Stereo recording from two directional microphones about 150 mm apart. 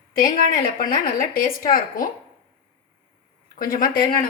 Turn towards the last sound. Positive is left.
turn(degrees=70)  # may be behind; listen again after turning